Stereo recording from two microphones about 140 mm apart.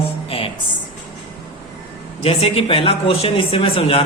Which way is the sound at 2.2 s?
45° left (ahead or behind).